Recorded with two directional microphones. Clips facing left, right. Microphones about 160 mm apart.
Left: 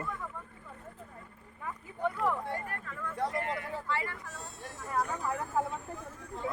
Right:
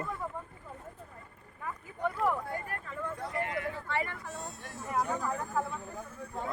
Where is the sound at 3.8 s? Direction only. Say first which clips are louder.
Left 1 dB; 60° right (ahead or behind).